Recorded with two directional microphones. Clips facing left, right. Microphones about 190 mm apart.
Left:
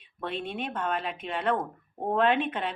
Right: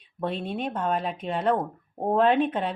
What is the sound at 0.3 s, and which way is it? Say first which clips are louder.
A woman's voice: right 4 dB; 40° right (ahead or behind).